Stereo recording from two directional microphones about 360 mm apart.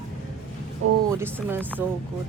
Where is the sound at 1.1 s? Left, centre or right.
Centre.